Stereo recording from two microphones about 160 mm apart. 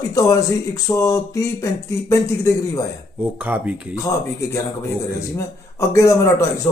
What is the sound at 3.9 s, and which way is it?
Music, 20° left (ahead or behind).